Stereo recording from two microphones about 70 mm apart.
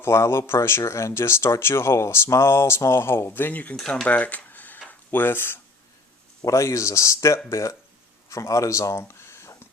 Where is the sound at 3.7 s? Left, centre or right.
Centre.